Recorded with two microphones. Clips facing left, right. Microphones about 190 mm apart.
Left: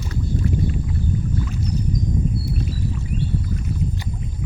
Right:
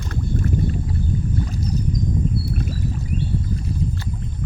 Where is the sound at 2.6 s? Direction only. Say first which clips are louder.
Even; 50° right (ahead or behind).